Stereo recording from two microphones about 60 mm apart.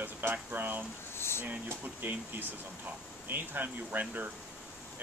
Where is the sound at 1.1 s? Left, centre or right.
Left.